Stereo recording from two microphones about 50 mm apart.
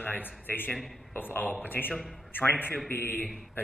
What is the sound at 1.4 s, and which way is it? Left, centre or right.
Speech, left.